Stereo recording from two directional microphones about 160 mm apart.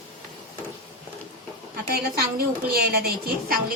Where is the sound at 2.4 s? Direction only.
75° right (ahead or behind).